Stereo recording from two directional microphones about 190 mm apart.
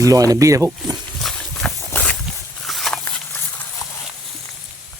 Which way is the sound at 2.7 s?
Centre (ahead or behind).